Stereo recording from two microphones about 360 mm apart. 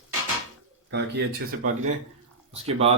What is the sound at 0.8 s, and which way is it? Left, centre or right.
Mantra, right.